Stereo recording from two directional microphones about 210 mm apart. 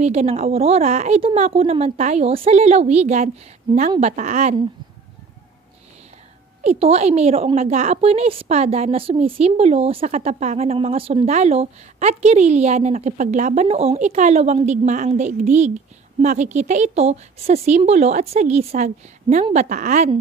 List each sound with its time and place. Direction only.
0.0 s a woman's voice: 30° right (ahead or behind)
6.6 s a woman's voice: 30° right (ahead or behind)